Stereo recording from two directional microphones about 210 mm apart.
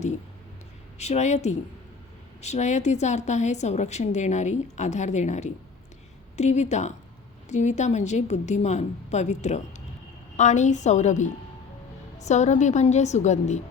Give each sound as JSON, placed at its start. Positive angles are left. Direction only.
{"t": 0.9, "sound": "a woman's voice", "side_deg": 30}